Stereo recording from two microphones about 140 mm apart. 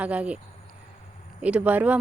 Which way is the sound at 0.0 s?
10° right (ahead or behind).